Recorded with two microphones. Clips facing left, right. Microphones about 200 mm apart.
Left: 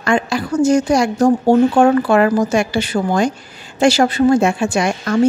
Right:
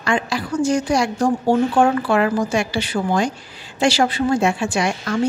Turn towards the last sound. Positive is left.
turn(degrees=45)  # may be behind; listen again after turning